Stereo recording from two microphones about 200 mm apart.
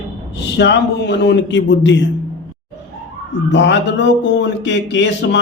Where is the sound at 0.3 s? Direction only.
60° left (ahead or behind).